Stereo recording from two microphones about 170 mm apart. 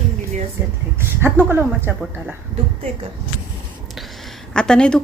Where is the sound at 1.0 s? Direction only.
15° right (ahead or behind).